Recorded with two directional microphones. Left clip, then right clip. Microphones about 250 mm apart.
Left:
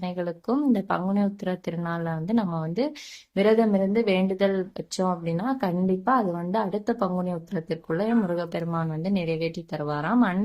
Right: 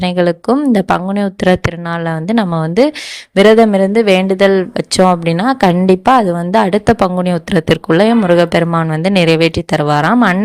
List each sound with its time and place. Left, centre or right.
0.0 s speech: right